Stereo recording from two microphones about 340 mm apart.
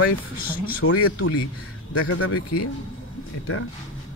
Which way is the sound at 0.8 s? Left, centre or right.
Left.